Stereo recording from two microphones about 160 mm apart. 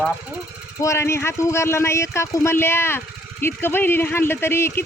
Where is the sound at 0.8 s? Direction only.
15° left (ahead or behind).